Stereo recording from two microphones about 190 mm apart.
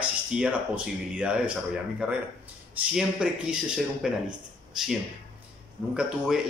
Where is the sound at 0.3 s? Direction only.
5° right (ahead or behind).